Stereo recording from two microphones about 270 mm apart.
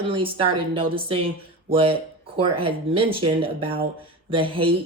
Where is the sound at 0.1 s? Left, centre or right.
Centre.